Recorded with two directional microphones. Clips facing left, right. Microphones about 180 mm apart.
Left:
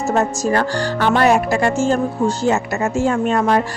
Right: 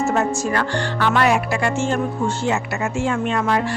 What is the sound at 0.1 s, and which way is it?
Speech, 40° left (ahead or behind).